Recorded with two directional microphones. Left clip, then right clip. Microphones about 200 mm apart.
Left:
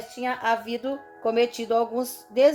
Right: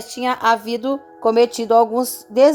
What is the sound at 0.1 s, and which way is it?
A woman's voice, 50° right (ahead or behind).